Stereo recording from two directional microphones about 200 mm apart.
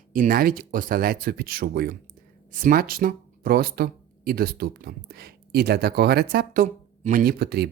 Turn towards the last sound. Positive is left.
turn(degrees=-50)  # may be behind; listen again after turning